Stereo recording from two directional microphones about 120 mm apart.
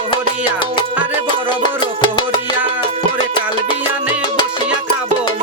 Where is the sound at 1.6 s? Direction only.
40° left (ahead or behind).